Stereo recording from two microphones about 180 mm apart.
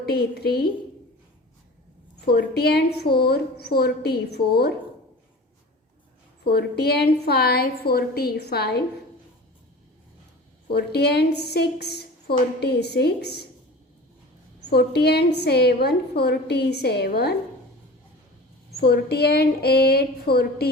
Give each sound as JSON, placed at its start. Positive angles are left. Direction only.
{"t": 0.0, "sound": "a woman's voice", "side_deg": 60}
{"t": 2.2, "sound": "a woman's voice", "side_deg": 60}
{"t": 6.4, "sound": "a woman's voice", "side_deg": 65}
{"t": 10.7, "sound": "a woman's voice", "side_deg": 65}
{"t": 14.7, "sound": "a woman's voice", "side_deg": 65}
{"t": 18.8, "sound": "a woman's voice", "side_deg": 65}